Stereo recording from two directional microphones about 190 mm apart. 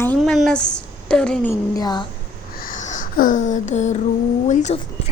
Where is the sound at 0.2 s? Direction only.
Centre (ahead or behind).